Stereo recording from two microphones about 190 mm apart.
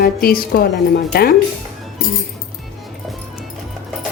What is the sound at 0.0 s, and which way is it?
Speech, 55° left (ahead or behind).